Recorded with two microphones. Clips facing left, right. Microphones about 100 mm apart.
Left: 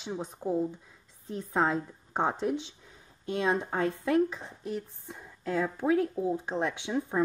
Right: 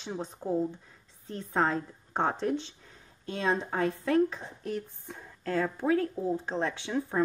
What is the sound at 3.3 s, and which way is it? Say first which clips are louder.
Speech: left 1 dB; 20° left (ahead or behind).